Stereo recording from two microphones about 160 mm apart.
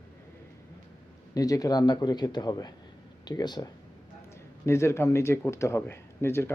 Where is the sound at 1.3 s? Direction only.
20° left (ahead or behind).